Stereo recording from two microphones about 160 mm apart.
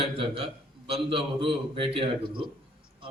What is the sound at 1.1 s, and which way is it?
A man's voice, 35° right (ahead or behind).